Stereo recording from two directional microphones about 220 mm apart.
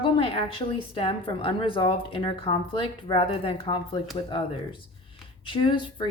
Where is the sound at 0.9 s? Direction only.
25° left (ahead or behind).